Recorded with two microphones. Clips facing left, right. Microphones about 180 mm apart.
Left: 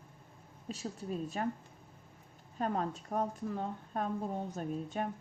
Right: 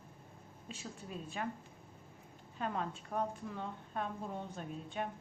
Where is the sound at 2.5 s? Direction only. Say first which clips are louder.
Left 4 dB; 40° left (ahead or behind).